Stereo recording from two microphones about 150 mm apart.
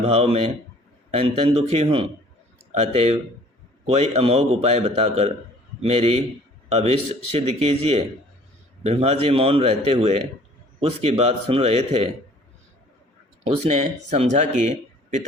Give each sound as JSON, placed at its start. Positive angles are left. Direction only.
{"t": 0.0, "sound": "a man's voice", "side_deg": -45}
{"t": 13.4, "sound": "speech", "side_deg": -45}